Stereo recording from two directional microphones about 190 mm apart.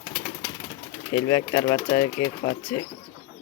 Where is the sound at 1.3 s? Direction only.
20° left (ahead or behind).